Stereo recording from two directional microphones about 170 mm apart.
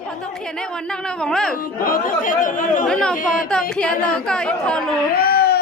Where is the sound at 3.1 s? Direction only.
55° left (ahead or behind).